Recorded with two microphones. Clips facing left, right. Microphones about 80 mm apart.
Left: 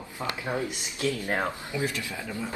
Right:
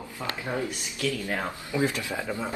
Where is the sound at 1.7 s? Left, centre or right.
Right.